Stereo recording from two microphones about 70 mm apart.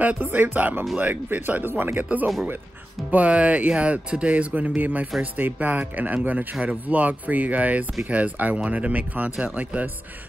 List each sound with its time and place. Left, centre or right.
0.2 s speech: right
3.1 s speech: centre